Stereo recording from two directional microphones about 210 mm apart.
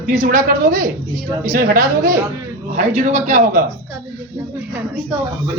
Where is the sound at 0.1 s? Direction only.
40° right (ahead or behind).